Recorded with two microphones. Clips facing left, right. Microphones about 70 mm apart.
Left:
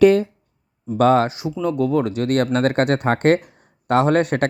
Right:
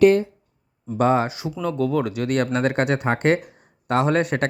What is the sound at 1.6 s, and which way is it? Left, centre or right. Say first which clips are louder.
Speech: left 3 dB; left.